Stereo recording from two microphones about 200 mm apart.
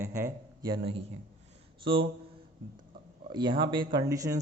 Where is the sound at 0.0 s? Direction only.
15° right (ahead or behind).